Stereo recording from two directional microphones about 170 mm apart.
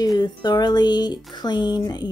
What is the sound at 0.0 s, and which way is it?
A woman's voice, 25° left (ahead or behind).